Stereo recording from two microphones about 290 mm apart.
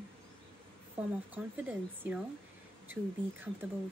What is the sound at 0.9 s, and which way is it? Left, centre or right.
A woman's voice, centre.